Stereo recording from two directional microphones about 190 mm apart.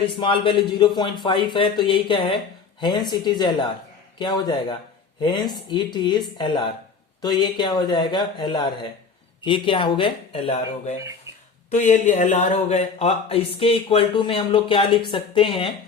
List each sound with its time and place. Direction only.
0.2 s speech: 25° left (ahead or behind)
11.7 s speech: 40° left (ahead or behind)